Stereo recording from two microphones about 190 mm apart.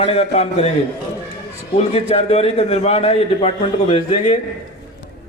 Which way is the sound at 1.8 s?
35° left (ahead or behind).